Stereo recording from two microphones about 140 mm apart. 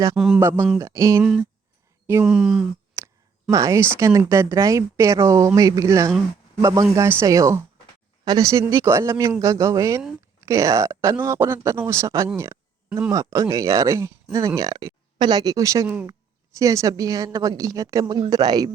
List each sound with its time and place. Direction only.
0.3 s a woman's voice: 15° right (ahead or behind)
1.2 s speech: 5° right (ahead or behind)
3.0 s a sound: 20° right (ahead or behind)
3.5 s a woman's voice: 25° right (ahead or behind)